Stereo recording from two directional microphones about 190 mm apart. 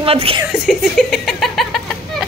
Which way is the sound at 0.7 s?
Centre (ahead or behind).